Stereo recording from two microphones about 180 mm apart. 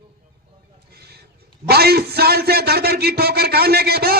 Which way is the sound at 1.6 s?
60° right (ahead or behind).